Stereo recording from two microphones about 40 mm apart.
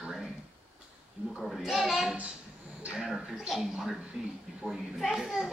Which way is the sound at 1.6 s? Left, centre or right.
Centre.